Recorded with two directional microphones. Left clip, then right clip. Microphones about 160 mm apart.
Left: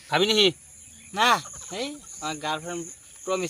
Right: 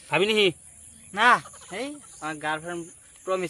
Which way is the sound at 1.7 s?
10° left (ahead or behind).